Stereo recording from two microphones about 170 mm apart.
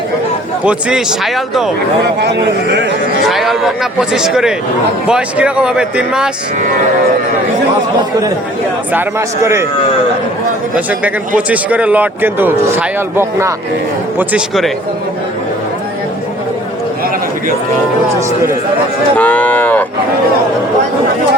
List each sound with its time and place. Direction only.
0.6 s a man's voice: 5° right (ahead or behind)
2.2 s a man's voice: 85° right
3.2 s a man's voice: centre (ahead or behind)
8.9 s speech: 15° right (ahead or behind)
11.3 s speech: 10° right (ahead or behind)
14.2 s a man's voice: 5° right (ahead or behind)
19.1 s cattle: 10° left (ahead or behind)